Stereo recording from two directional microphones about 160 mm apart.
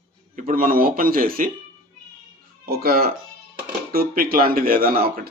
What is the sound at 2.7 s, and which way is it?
Speech, 75° right (ahead or behind).